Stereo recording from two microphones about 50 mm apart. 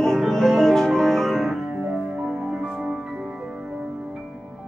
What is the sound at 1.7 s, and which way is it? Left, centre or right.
Music, centre.